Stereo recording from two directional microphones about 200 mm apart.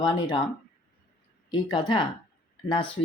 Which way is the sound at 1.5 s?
20° left (ahead or behind).